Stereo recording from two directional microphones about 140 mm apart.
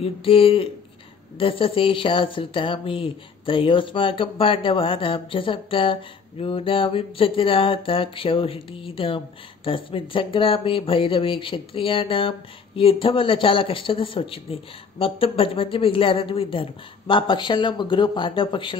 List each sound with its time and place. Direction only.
0.0 s speech: 40° left (ahead or behind)